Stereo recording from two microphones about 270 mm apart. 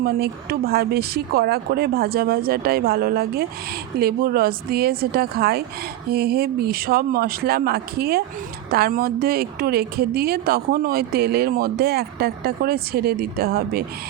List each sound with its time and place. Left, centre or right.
0.0 s a woman's voice: right